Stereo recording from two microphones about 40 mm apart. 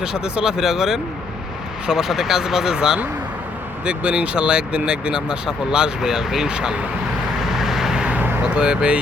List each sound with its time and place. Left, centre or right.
0.0 s speech: centre
3.8 s speech: right
7.4 s vehicle: centre
8.4 s speech: right